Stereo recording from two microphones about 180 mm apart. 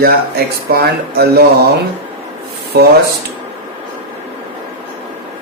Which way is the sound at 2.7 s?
65° right (ahead or behind).